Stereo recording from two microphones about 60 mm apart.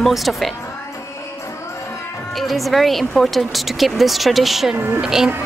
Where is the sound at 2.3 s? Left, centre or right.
Centre.